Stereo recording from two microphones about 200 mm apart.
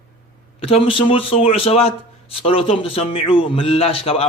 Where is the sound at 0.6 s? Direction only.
30° left (ahead or behind).